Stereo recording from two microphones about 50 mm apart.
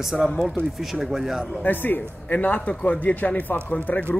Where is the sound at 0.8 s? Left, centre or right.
Centre.